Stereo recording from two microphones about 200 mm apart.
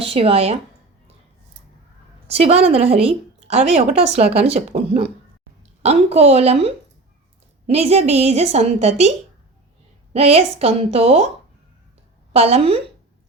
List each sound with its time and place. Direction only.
0.0 s speech: 30° right (ahead or behind)
2.2 s a woman's voice: 30° right (ahead or behind)
12.3 s a woman's voice: 30° right (ahead or behind)